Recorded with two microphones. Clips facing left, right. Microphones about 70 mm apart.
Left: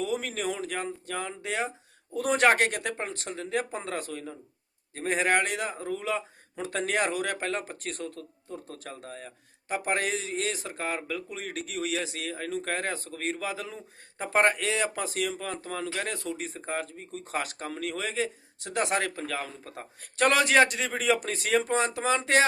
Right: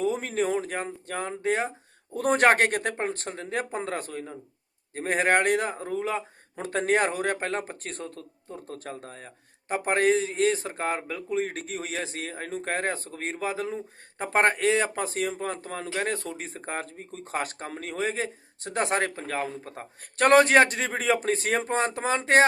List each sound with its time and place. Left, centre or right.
0.0 s a man's voice: right